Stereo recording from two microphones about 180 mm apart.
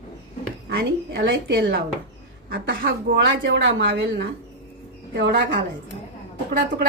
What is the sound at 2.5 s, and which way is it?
Speech, 55° right (ahead or behind).